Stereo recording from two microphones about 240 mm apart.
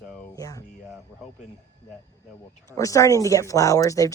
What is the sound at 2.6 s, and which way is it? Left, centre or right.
Speech, centre.